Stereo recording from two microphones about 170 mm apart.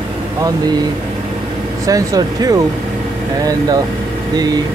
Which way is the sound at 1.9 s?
20° right (ahead or behind).